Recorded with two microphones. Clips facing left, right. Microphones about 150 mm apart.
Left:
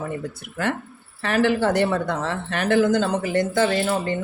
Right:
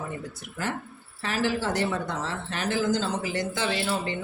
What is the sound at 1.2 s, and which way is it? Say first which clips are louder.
Speech: left 7 dB; 60° left (ahead or behind).